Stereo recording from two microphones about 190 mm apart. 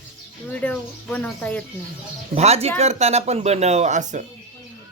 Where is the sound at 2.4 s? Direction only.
35° right (ahead or behind).